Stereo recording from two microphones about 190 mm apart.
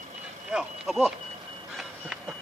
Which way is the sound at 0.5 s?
5° right (ahead or behind).